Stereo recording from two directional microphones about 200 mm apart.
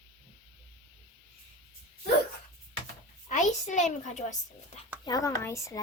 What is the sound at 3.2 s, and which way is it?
A woman's voice, 40° left (ahead or behind).